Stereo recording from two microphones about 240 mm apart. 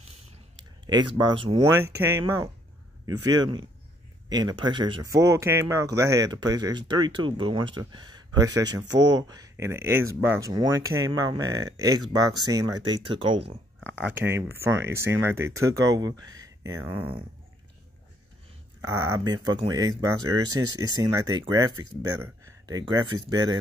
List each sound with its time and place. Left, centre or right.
0.6 s speech: centre
13.7 s speech: centre
18.8 s speech: centre
22.7 s speech: centre